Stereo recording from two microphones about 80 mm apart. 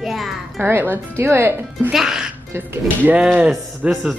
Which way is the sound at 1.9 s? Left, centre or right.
Centre.